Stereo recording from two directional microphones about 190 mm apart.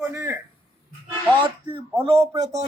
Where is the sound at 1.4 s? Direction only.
25° right (ahead or behind).